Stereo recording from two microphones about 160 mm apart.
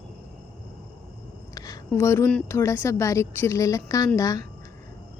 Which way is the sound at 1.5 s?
20° left (ahead or behind).